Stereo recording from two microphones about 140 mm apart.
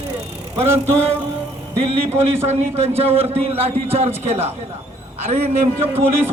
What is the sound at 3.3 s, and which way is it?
A man's voice, 45° right (ahead or behind).